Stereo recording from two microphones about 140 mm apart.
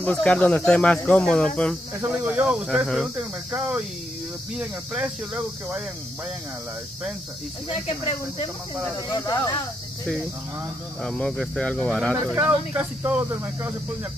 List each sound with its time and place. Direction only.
0.0 s speech: 10° left (ahead or behind)
2.0 s speech: 10° right (ahead or behind)
7.7 s speech: 40° left (ahead or behind)
9.1 s speech: 25° left (ahead or behind)
11.1 s speech: 5° left (ahead or behind)
12.4 s speech: 15° right (ahead or behind)